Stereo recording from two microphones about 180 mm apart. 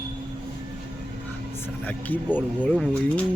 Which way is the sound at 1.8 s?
10° left (ahead or behind).